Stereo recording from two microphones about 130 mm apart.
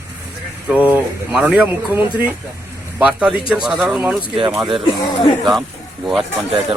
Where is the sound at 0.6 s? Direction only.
10° right (ahead or behind).